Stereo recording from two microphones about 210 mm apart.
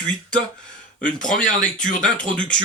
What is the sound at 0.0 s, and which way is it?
Speech, 5° left (ahead or behind).